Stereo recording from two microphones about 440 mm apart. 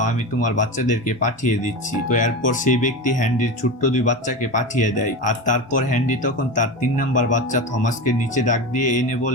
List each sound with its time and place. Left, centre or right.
0.0 s speech: centre